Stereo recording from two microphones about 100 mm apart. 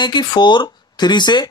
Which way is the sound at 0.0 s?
50° left (ahead or behind).